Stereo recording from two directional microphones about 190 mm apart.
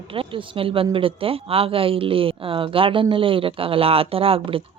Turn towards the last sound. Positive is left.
turn(degrees=-30)  # may be behind; listen again after turning